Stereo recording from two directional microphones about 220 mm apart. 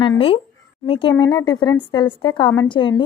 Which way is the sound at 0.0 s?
25° left (ahead or behind).